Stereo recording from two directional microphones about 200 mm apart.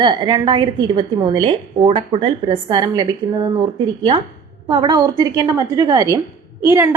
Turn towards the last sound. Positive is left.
turn(degrees=-15)  # may be behind; listen again after turning